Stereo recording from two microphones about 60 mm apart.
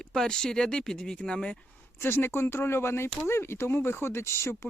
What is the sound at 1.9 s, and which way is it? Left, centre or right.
Speech, left.